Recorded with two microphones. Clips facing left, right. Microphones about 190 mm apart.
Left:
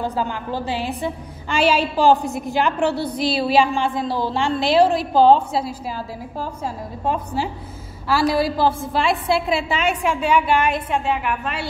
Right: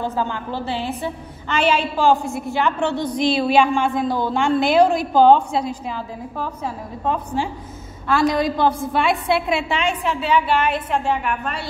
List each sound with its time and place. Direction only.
0.0 s a woman's voice: 15° left (ahead or behind)
3.0 s a woman's voice: 5° left (ahead or behind)
3.3 s a woman's voice: 35° left (ahead or behind)
4.0 s a woman's voice: centre (ahead or behind)
4.9 s a woman's voice: 35° left (ahead or behind)
5.6 s a woman's voice: 5° left (ahead or behind)
8.1 s a woman's voice: 5° left (ahead or behind)